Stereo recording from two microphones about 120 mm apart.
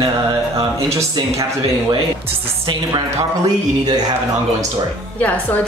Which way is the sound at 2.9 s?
35° right (ahead or behind).